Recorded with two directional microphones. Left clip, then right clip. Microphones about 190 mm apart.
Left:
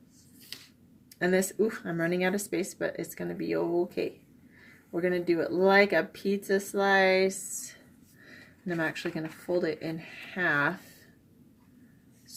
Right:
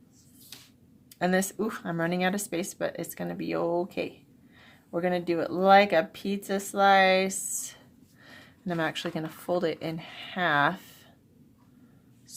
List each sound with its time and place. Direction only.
1.2 s speech: 45° right (ahead or behind)